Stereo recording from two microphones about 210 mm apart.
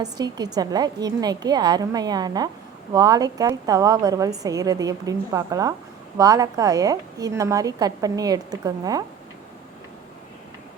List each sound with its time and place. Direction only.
0.0 s a woman's voice: 20° right (ahead or behind)